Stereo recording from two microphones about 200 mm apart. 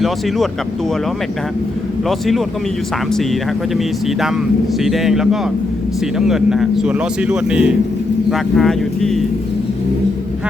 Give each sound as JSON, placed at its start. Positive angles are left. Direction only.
{"t": 2.0, "sound": "speech", "side_deg": 0}
{"t": 3.8, "sound": "speech", "side_deg": 0}